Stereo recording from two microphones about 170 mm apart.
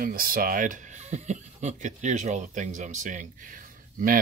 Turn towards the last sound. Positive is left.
turn(degrees=-50)  # may be behind; listen again after turning